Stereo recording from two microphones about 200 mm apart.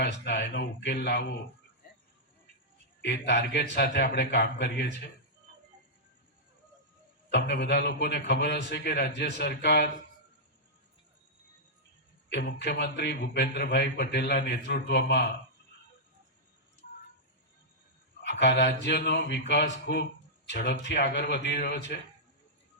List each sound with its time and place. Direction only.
0.0 s a man's voice: 55° left (ahead or behind)
1.8 s cricket: 50° left (ahead or behind)
3.0 s a man's voice: 60° left (ahead or behind)
7.3 s a man's voice: 60° left (ahead or behind)
12.3 s a man's voice: 55° left (ahead or behind)
18.2 s a man's voice: 60° left (ahead or behind)